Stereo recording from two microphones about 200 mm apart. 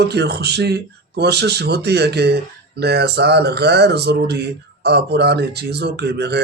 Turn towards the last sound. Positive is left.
turn(degrees=-55)  # may be behind; listen again after turning